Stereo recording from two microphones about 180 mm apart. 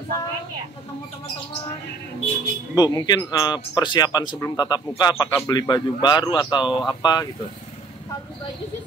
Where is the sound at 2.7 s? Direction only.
20° left (ahead or behind).